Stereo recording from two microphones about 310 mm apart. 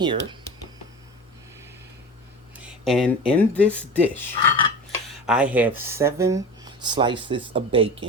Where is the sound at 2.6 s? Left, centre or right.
Centre.